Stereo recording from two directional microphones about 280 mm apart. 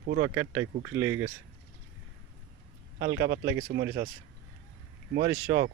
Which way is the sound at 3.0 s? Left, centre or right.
Right.